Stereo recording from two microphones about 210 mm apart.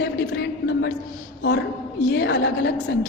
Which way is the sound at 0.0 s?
55° left (ahead or behind).